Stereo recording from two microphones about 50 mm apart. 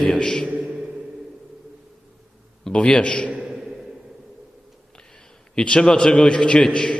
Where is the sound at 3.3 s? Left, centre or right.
Centre.